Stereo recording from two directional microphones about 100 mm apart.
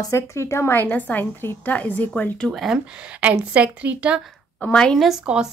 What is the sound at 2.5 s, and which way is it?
Speech, centre (ahead or behind).